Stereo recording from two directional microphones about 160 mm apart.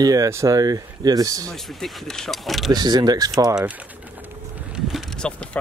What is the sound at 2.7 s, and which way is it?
Speech, 25° right (ahead or behind).